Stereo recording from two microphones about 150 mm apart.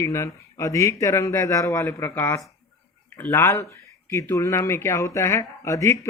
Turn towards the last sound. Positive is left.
turn(degrees=20)  # may be behind; listen again after turning